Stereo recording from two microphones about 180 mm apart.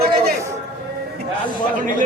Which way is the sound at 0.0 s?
60° right (ahead or behind).